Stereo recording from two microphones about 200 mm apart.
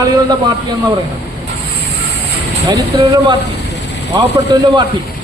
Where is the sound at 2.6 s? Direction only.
20° right (ahead or behind).